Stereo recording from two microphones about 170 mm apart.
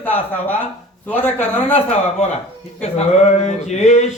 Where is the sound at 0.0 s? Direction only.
10° left (ahead or behind).